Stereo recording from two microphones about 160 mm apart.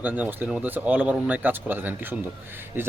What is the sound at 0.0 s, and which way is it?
Speech, 10° right (ahead or behind).